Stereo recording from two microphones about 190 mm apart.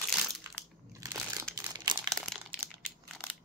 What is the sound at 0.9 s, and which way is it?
Crumpling, 15° right (ahead or behind).